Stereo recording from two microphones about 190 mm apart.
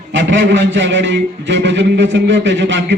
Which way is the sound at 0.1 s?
75° right (ahead or behind).